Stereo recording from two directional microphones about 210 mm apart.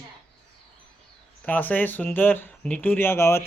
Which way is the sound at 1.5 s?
10° left (ahead or behind).